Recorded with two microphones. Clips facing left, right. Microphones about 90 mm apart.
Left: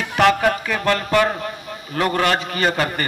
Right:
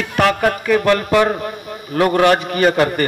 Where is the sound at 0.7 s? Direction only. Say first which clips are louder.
Right 5 dB; 20° right (ahead or behind).